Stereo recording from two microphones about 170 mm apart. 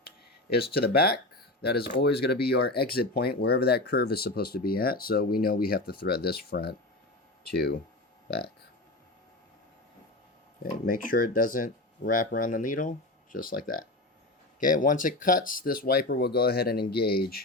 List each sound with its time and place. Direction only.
0.7 s speech: 65° left (ahead or behind)
10.6 s speech: 55° left (ahead or behind)